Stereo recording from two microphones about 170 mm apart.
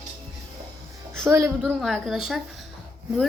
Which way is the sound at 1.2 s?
10° right (ahead or behind).